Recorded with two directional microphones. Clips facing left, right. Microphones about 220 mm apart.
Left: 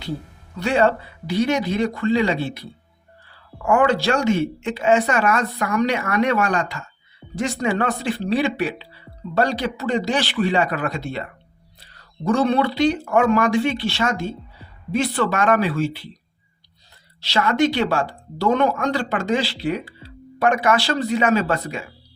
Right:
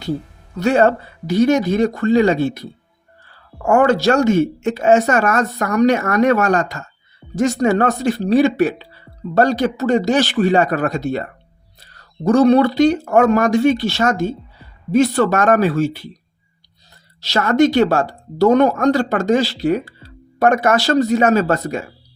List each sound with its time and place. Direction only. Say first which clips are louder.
0.5 s speech: right 4 dB; 45° right (ahead or behind)
17.2 s speech: right 5 dB; 45° right (ahead or behind)